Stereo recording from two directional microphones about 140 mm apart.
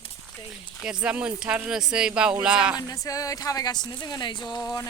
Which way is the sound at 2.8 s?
25° left (ahead or behind).